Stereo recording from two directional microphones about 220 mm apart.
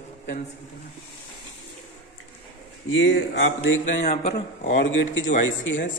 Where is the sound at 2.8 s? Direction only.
60° left (ahead or behind).